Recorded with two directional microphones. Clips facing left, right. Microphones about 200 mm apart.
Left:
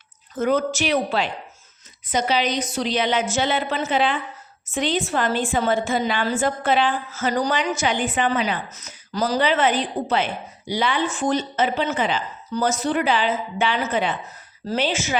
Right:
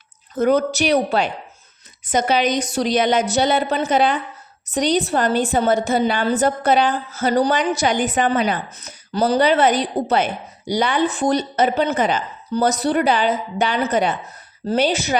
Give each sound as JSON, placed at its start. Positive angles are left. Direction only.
{"t": 0.3, "sound": "a woman's voice", "side_deg": -40}